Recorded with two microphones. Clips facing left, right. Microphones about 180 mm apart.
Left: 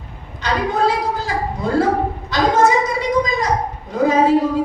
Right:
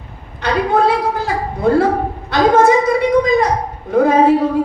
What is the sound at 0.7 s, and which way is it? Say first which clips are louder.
A woman's voice: right 4 dB; 60° right (ahead or behind).